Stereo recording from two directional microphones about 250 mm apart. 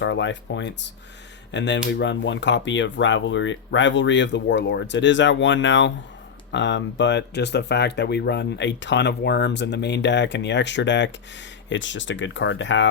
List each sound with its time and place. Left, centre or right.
0.0 s speech: left